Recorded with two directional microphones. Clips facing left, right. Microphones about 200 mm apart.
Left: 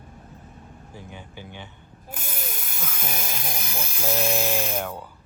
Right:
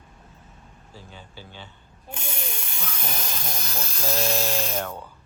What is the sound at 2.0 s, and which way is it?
Ratchet, 5° left (ahead or behind).